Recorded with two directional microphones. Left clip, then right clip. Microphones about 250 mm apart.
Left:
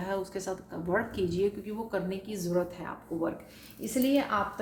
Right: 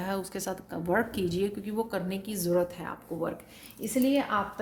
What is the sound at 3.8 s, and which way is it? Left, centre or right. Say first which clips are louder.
Speech: right 1 dB; right.